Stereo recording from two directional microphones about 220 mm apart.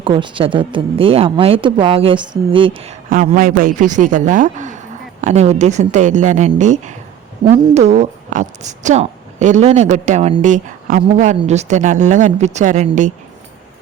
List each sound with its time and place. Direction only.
0.0 s a woman's voice: 20° right (ahead or behind)